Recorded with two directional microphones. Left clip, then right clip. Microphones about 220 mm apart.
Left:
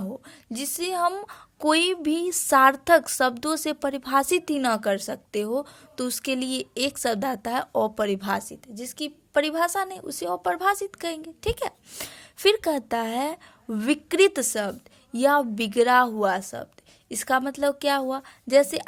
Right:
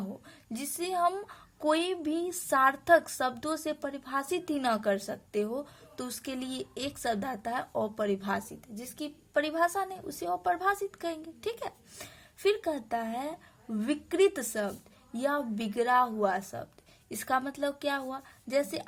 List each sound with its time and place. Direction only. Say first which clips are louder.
0.5 s a woman's voice: left 5 dB; 30° left (ahead or behind)